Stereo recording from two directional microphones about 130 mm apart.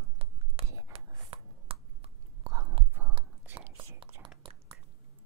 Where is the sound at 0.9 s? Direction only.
45° right (ahead or behind).